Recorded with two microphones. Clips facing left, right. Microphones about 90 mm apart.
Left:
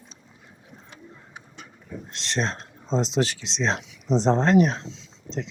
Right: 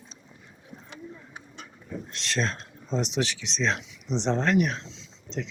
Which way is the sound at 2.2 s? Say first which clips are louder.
Left 2 dB; 25° left (ahead or behind).